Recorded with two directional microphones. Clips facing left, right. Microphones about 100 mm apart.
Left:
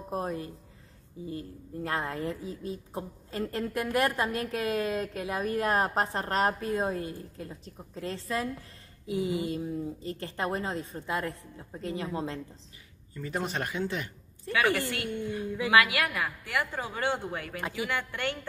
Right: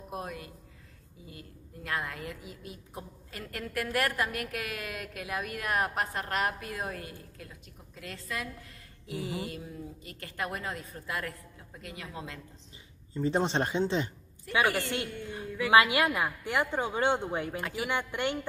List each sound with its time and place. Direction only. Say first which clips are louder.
0.1 s a woman's voice: left 6 dB; 35° left (ahead or behind)
13.1 s a woman's voice: right 5 dB; 25° right (ahead or behind)
15.4 s speech: right 3 dB; 20° left (ahead or behind)
15.7 s a woman's voice: right 2 dB; 25° right (ahead or behind)